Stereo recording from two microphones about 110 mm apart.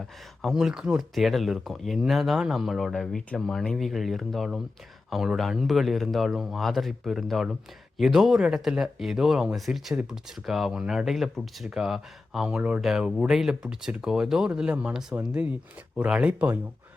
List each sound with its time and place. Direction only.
0.4 s speech: 5° right (ahead or behind)